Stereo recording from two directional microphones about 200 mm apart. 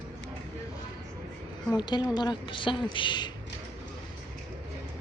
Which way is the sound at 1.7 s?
20° left (ahead or behind).